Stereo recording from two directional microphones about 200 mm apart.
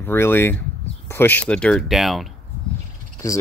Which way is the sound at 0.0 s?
10° left (ahead or behind).